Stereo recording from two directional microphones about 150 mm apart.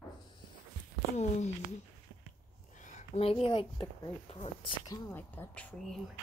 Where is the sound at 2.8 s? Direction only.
55° left (ahead or behind).